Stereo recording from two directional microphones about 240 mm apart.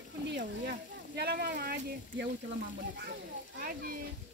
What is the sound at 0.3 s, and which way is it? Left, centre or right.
Speech, right.